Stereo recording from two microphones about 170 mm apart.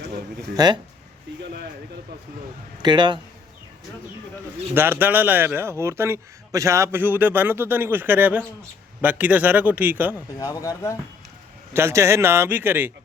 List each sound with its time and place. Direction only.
0.5 s a man's voice: 25° right (ahead or behind)
2.8 s a man's voice: 25° right (ahead or behind)
4.7 s a man's voice: 10° right (ahead or behind)
10.2 s speech: 20° left (ahead or behind)
11.7 s a man's voice: 15° right (ahead or behind)